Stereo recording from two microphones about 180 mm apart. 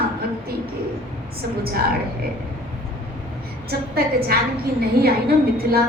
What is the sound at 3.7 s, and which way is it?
A woman's voice, 60° right (ahead or behind).